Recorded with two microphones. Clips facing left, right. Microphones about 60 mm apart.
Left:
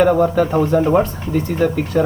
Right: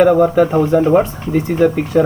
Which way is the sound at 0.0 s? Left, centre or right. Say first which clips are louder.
Right 3 dB; centre.